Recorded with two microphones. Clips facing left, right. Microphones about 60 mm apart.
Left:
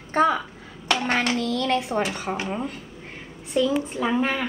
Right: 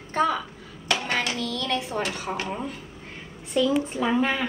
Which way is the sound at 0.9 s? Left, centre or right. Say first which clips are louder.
Left 3 dB; left.